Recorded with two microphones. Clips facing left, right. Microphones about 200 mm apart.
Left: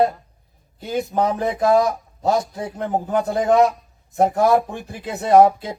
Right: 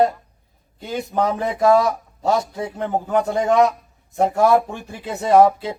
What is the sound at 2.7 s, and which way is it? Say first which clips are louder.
Speech: even; 35° left (ahead or behind).